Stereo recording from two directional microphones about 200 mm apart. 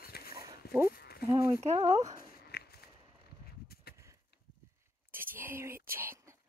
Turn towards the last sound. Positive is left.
turn(degrees=-10)  # may be behind; listen again after turning